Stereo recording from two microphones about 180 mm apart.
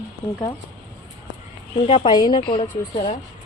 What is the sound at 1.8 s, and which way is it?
Speech, 30° left (ahead or behind).